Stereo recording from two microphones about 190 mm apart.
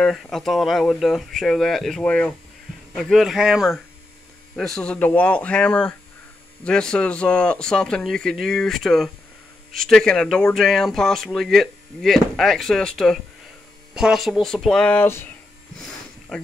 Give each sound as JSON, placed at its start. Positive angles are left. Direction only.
{"t": 0.0, "sound": "speech", "side_deg": 0}
{"t": 16.3, "sound": "speech", "side_deg": 0}